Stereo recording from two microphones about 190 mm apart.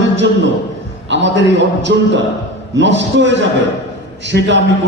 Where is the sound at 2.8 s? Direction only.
70° right (ahead or behind).